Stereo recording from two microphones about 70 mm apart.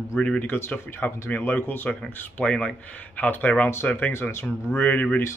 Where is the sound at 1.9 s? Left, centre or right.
Centre.